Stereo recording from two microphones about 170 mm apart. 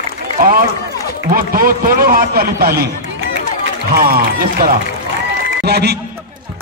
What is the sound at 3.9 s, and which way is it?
Speech, 60° right (ahead or behind).